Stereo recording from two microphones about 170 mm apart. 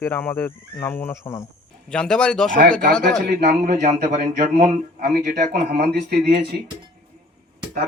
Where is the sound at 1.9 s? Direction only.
5° left (ahead or behind).